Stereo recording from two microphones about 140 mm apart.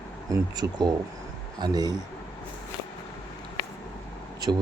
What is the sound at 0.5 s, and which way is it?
Speech, 30° right (ahead or behind).